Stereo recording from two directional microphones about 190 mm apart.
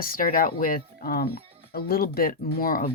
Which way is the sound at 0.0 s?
50° left (ahead or behind).